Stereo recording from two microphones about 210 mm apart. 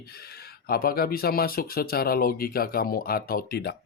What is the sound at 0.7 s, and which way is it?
Speech, 45° left (ahead or behind).